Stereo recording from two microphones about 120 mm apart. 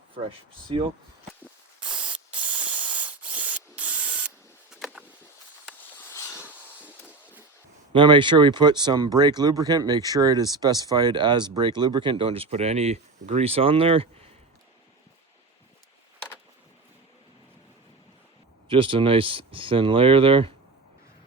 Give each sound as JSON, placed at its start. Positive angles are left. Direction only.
{"t": 0.1, "sound": "speech", "side_deg": -45}
{"t": 3.3, "sound": "spray", "side_deg": -10}
{"t": 4.7, "sound": "a sound", "side_deg": -5}
{"t": 7.9, "sound": "speech", "side_deg": -40}
{"t": 18.7, "sound": "speech", "side_deg": -45}